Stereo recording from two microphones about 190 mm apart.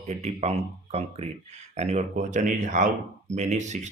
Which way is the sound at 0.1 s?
35° right (ahead or behind).